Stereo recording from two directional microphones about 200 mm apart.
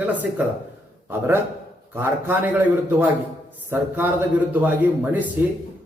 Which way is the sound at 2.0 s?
10° right (ahead or behind).